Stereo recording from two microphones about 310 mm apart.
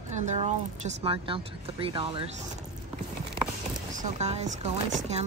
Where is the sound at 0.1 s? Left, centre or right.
Right.